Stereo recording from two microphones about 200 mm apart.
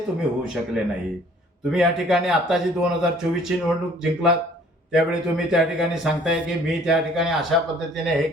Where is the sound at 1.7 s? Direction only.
5° right (ahead or behind).